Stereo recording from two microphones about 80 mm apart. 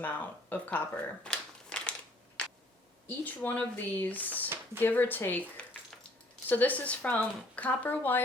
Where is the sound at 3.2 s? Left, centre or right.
Left.